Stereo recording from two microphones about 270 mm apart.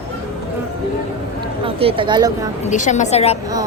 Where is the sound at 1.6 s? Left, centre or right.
Centre.